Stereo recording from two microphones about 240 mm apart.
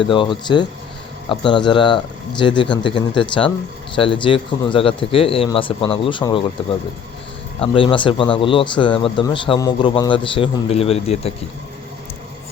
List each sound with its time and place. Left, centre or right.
0.0 s speech: left